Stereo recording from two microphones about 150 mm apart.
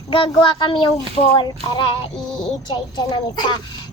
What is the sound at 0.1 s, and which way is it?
Speech, 35° left (ahead or behind).